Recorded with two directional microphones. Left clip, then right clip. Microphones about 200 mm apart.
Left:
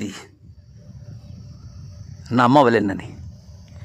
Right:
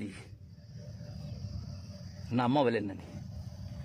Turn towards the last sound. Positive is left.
turn(degrees=45)  # may be behind; listen again after turning